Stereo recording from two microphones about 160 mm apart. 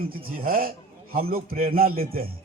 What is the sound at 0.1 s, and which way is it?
A man's voice, 65° right (ahead or behind).